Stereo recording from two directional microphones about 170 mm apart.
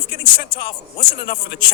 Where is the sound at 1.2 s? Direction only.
55° left (ahead or behind).